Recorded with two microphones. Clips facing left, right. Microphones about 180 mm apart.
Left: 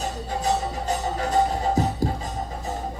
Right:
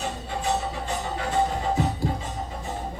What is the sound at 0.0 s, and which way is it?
Music, 40° left (ahead or behind).